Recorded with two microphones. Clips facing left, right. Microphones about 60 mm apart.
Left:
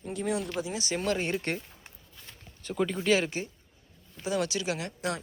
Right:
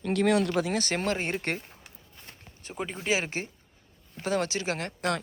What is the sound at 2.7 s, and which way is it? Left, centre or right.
Speech, centre.